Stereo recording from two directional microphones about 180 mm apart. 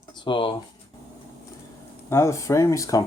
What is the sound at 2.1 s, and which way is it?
Speech, 15° left (ahead or behind).